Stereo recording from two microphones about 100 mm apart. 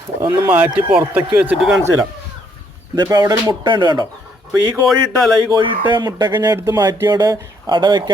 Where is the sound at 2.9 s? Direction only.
40° right (ahead or behind).